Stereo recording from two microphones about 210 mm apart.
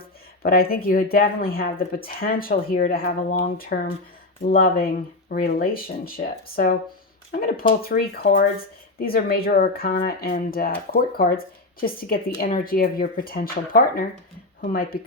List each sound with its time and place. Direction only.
0.0 s speech: 45° left (ahead or behind)